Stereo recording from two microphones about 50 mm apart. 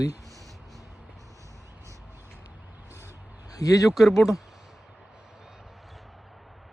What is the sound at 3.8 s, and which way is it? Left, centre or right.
Speech, centre.